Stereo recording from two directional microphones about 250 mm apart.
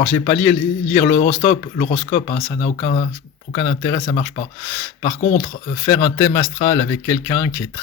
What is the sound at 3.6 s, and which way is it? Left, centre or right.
Speech, centre.